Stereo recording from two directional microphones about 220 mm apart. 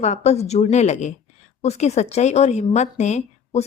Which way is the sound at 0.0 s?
30° left (ahead or behind).